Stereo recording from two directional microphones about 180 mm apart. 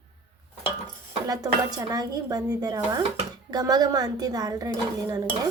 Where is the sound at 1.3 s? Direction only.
20° right (ahead or behind).